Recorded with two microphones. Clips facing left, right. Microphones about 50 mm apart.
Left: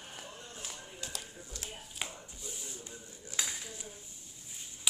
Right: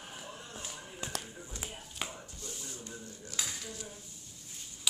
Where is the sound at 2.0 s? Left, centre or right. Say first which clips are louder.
Right 1 dB; centre.